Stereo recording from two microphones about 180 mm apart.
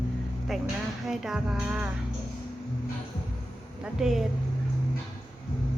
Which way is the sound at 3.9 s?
5° right (ahead or behind).